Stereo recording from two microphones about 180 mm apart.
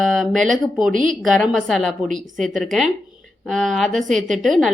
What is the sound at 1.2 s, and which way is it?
A woman's voice, centre (ahead or behind).